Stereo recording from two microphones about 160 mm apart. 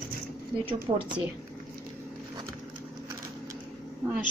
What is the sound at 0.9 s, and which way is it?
Speech, 30° right (ahead or behind).